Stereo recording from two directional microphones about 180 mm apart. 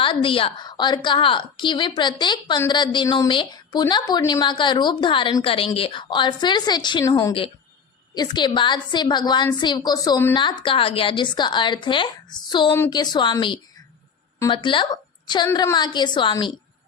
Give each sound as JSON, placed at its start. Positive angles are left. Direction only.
{"t": 0.0, "sound": "a woman's voice", "side_deg": 30}
{"t": 10.3, "sound": "a woman's voice", "side_deg": 25}